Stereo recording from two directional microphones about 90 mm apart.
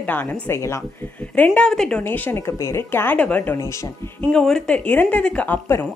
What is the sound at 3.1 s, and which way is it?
Speech, 15° left (ahead or behind).